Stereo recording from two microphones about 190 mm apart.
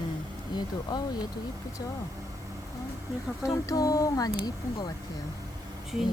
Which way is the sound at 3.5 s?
20° left (ahead or behind).